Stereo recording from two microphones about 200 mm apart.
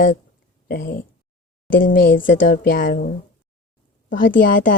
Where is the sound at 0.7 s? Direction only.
45° left (ahead or behind).